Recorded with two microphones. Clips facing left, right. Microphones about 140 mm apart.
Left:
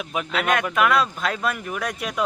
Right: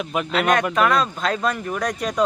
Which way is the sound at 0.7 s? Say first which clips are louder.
Right 1 dB; 35° right (ahead or behind).